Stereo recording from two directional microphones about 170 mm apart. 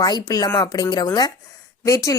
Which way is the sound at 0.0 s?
20° left (ahead or behind).